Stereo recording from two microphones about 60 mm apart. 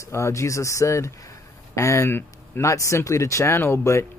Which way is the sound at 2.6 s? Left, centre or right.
Left.